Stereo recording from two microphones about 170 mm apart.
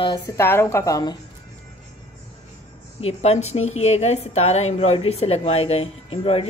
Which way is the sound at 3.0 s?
40° left (ahead or behind).